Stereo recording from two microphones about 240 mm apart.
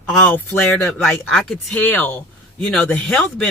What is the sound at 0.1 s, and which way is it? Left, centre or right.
Speech, centre.